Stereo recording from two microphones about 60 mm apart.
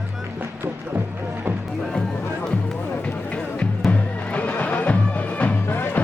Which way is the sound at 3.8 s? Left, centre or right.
Left.